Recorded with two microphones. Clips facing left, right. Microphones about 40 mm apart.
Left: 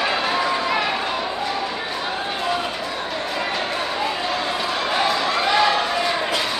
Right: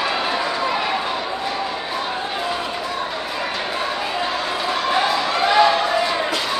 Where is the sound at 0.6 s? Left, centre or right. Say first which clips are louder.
Even; centre.